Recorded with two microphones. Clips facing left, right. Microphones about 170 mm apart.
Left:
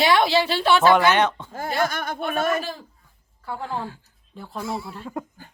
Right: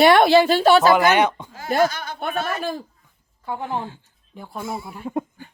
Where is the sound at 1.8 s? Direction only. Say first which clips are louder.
Right 3 dB; 55° left (ahead or behind).